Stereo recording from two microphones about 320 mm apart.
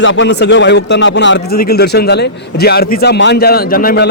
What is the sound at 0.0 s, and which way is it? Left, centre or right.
A man's voice, left.